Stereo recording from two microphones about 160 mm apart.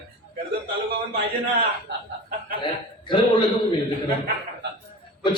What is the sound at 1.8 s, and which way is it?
Snicker, 65° right (ahead or behind).